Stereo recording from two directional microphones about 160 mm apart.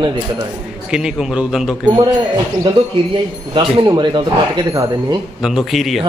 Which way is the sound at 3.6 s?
30° right (ahead or behind).